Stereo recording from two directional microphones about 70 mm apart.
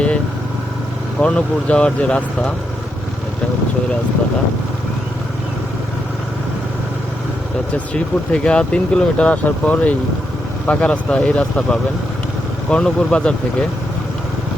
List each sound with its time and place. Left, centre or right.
1.2 s speech: centre
7.9 s speech: centre